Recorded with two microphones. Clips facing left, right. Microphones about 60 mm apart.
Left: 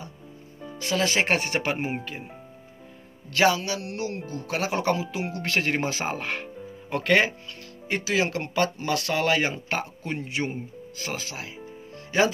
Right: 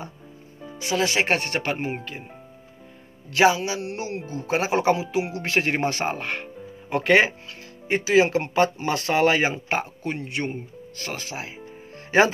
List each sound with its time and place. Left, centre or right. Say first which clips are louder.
0.6 s speech: right 2 dB; centre
3.3 s speech: right 3 dB; centre
5.8 s speech: right 3 dB; centre
6.9 s speech: right 3 dB; centre
10.0 s speech: right 1 dB; centre
11.3 s speech: right 3 dB; right
12.1 s speech: right 4 dB; right